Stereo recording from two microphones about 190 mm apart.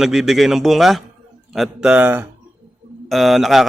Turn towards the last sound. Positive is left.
turn(degrees=0)  # may be behind; listen again after turning